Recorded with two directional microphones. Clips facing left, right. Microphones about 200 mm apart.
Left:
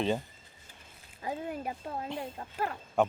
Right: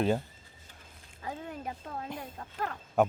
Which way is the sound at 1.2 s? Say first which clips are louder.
Left 3 dB; 10° left (ahead or behind).